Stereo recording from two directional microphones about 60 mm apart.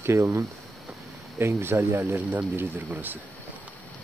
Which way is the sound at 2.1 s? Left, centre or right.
Right.